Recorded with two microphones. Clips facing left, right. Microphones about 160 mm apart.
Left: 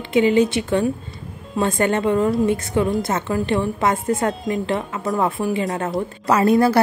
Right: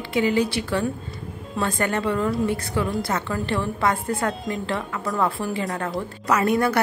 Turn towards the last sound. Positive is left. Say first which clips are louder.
# left 5 dB
turn(degrees=30)  # may be behind; listen again after turning